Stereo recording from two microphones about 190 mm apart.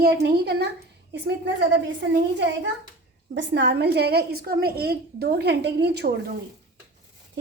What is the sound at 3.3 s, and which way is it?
A woman's voice, 70° right (ahead or behind).